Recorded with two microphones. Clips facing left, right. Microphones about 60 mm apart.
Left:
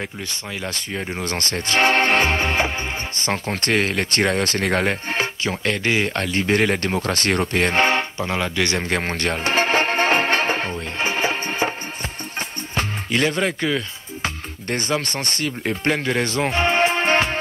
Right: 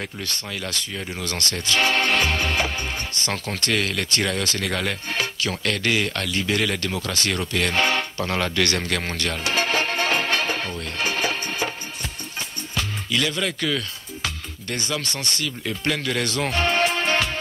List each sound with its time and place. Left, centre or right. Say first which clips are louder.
0.7 s speech: left 5 dB; left
8.2 s music: left 1 dB; centre
12.7 s music: left 3 dB; left
14.7 s speech: left 5 dB; left